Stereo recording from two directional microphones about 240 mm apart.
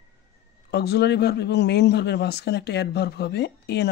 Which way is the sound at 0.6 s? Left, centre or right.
Left.